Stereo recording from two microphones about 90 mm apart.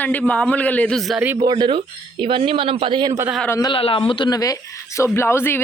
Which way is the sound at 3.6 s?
80° left.